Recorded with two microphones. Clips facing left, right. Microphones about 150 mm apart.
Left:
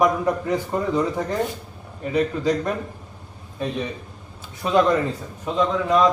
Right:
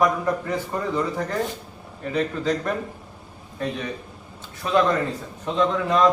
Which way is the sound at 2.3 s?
15° left (ahead or behind).